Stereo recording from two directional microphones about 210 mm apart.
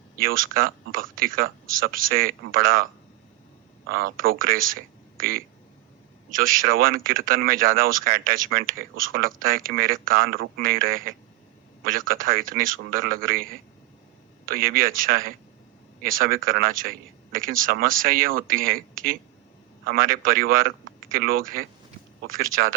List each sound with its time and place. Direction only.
0.2 s speech: 40° right (ahead or behind)
3.9 s speech: 45° right (ahead or behind)